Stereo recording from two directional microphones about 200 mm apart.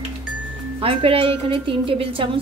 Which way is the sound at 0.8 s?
30° right (ahead or behind).